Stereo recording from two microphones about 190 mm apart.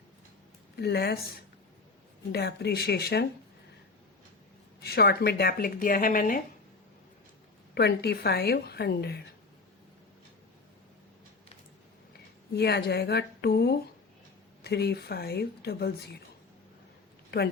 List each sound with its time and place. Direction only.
0.8 s a woman's voice: 60° left (ahead or behind)
2.3 s a woman's voice: 55° left (ahead or behind)
4.8 s speech: 55° left (ahead or behind)
7.8 s a woman's voice: 60° left (ahead or behind)
12.5 s a woman's voice: 60° left (ahead or behind)